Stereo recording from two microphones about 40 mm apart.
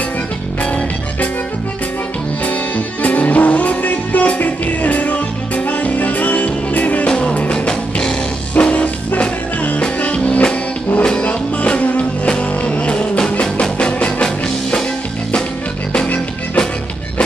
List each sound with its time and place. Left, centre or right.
0.6 s music: left
2.4 s music: left
7.1 s music: left
8.5 s music: left
14.2 s music: centre